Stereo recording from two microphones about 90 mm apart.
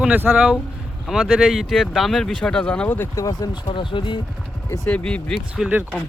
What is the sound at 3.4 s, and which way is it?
Speech, 60° left (ahead or behind).